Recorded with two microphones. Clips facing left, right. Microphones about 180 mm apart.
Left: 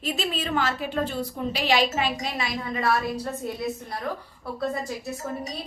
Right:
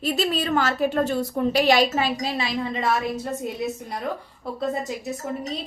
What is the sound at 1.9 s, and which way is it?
A woman's voice, 35° right (ahead or behind).